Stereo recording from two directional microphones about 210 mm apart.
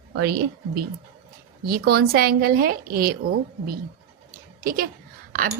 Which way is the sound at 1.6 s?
45° right (ahead or behind).